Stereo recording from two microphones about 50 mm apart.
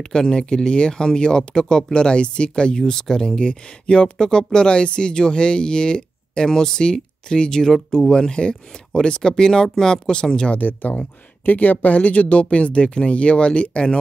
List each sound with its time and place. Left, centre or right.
0.0 s speech: centre
10.6 s speech: left; by 13.9 s centre